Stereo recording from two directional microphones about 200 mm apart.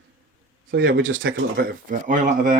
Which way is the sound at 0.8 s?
70° right (ahead or behind).